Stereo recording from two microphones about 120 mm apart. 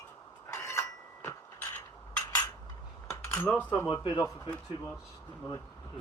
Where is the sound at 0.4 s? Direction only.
20° left (ahead or behind).